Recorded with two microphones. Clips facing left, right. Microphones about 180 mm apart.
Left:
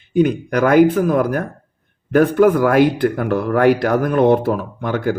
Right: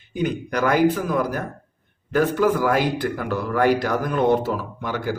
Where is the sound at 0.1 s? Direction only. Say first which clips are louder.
Left 8 dB; 55° left (ahead or behind).